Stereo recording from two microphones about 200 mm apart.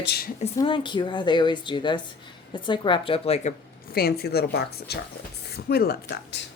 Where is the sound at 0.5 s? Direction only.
25° left (ahead or behind).